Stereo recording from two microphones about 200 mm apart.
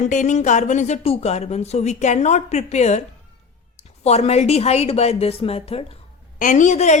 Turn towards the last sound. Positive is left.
turn(degrees=35)  # may be behind; listen again after turning